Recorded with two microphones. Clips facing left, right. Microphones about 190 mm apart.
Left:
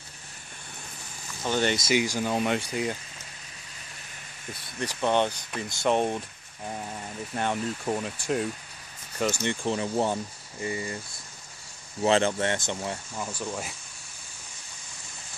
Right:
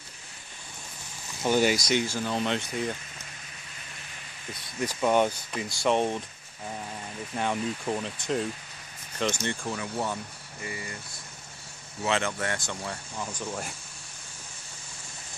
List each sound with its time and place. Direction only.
1.4 s speech: 10° right (ahead or behind)
1.9 s speech: 10° left (ahead or behind)
4.7 s speech: 10° right (ahead or behind)
7.3 s speech: centre (ahead or behind)
9.4 s speech: 20° left (ahead or behind)
12.0 s speech: 30° left (ahead or behind)
13.2 s speech: 5° left (ahead or behind)